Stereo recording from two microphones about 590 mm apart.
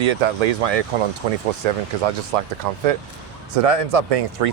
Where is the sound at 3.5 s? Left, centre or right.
Right.